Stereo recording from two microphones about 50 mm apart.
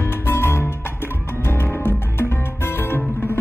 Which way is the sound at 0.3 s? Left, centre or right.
Left.